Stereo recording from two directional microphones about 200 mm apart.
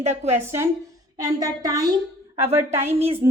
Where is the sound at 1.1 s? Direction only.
20° right (ahead or behind).